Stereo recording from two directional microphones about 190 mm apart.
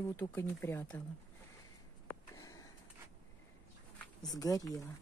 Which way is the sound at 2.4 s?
20° left (ahead or behind).